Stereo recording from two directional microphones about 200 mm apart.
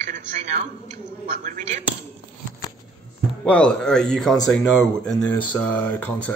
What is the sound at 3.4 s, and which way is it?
Speech, 5° left (ahead or behind).